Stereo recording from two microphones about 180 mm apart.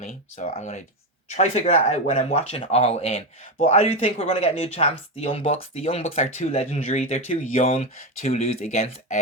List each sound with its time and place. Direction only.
0.0 s speech: 40° left (ahead or behind)